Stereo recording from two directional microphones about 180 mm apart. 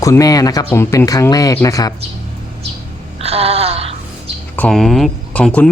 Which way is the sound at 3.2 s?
35° right (ahead or behind).